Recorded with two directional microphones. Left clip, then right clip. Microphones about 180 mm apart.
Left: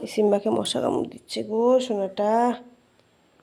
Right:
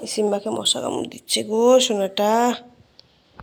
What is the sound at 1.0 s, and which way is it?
Speech, 5° left (ahead or behind).